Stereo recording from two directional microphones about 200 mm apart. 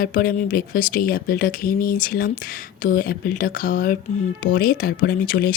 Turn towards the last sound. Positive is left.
turn(degrees=45)  # may be behind; listen again after turning